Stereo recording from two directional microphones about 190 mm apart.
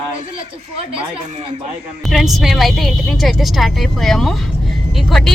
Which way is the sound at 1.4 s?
25° right (ahead or behind).